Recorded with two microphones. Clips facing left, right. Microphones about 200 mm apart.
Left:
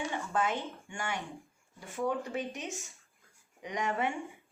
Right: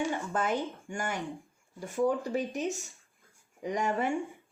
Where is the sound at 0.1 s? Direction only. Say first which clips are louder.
Right 2 dB; 40° right (ahead or behind).